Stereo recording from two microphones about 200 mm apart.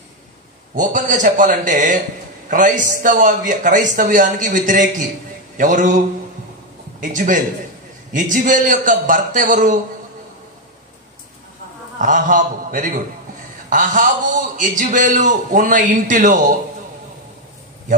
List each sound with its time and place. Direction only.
0.7 s a man's voice: 40° right (ahead or behind)
7.0 s a man's voice: 40° right (ahead or behind)
12.0 s a man's voice: 40° right (ahead or behind)